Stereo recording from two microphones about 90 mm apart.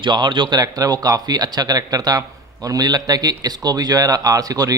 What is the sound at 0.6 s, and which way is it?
Speech, 45° right (ahead or behind).